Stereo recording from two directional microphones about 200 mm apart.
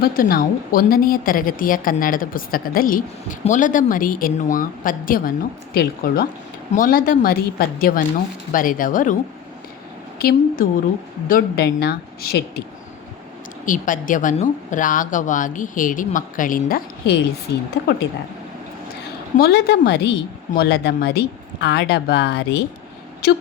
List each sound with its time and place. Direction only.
0.0 s a woman's voice: 45° left (ahead or behind)
10.2 s a woman's voice: 45° left (ahead or behind)
13.7 s a woman's voice: 40° left (ahead or behind)
19.4 s a woman's voice: 55° left (ahead or behind)